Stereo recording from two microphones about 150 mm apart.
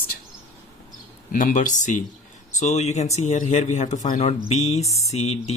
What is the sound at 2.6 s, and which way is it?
Speech, 45° left (ahead or behind).